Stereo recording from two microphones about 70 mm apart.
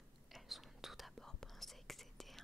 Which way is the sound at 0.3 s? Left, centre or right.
Centre.